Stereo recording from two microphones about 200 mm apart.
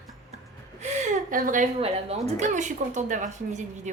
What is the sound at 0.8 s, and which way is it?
A woman's voice, 35° right (ahead or behind).